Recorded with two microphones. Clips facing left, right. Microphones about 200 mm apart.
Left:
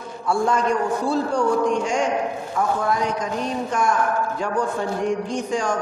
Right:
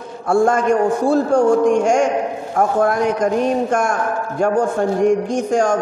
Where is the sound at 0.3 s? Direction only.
50° right (ahead or behind).